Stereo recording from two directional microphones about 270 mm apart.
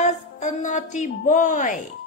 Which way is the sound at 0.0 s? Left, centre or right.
Left.